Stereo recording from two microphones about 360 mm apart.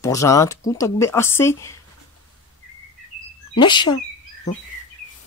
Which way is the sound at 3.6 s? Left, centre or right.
Centre.